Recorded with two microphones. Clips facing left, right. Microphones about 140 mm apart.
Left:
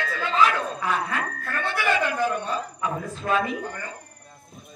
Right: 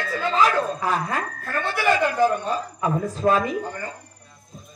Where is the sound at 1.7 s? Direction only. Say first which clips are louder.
Right 4 dB; 35° right (ahead or behind).